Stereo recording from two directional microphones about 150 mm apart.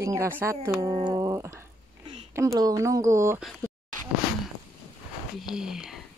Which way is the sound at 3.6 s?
15° left (ahead or behind).